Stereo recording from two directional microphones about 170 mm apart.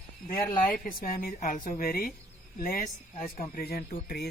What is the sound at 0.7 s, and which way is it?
A woman's voice, 55° left (ahead or behind).